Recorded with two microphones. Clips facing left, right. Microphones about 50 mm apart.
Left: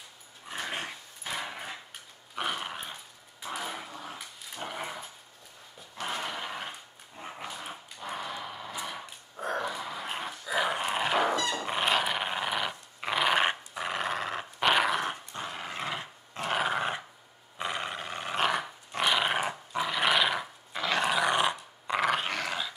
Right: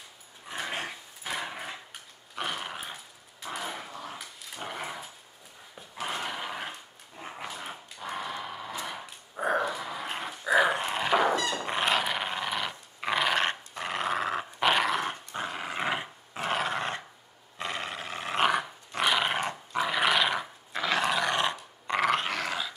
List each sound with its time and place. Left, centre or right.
0.5 s dog: centre
9.7 s dog: centre
13.7 s dog: centre
15.3 s dog: centre
15.8 s dog: right
16.5 s dog: centre
17.6 s roar: centre
18.3 s dog: centre
18.6 s dog: centre